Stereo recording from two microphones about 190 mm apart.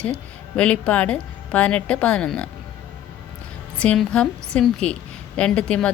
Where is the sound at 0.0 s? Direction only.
5° left (ahead or behind).